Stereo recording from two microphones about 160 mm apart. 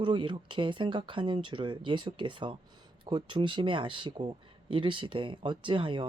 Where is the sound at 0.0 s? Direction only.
30° right (ahead or behind).